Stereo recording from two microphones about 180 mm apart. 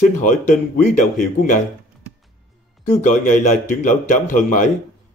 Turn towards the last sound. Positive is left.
turn(degrees=45)  # may be behind; listen again after turning